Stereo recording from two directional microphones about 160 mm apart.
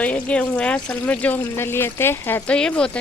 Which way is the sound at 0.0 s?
10° left (ahead or behind).